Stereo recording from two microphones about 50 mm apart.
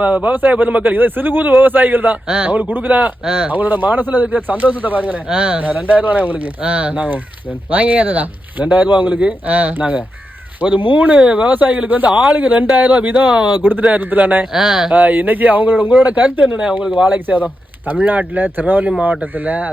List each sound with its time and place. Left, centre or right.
0.0 s a man's voice: right
2.2 s speech: centre
2.5 s a man's voice: right
3.2 s speech: centre
3.5 s a man's voice: right
13.1 s speech: right
13.5 s a man's voice: right
14.5 s speech: centre
14.9 s a man's voice: right
16.6 s speech: centre
17.1 s a man's voice: right